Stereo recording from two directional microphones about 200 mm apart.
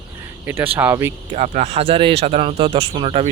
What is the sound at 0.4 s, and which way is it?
Speech, 10° right (ahead or behind).